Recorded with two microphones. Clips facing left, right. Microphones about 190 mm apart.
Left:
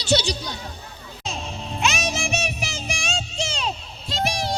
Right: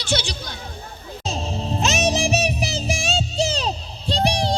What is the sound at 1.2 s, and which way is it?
Music, 35° right (ahead or behind).